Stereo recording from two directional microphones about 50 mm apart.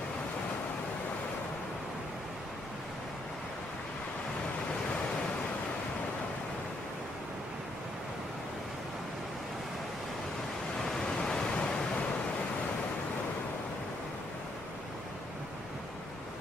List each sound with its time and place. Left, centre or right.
10.8 s pink noise: centre